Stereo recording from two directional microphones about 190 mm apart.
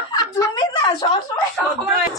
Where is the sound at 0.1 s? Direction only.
20° left (ahead or behind).